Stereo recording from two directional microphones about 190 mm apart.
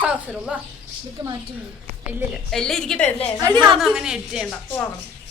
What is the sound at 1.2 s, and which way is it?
Speech, 20° right (ahead or behind).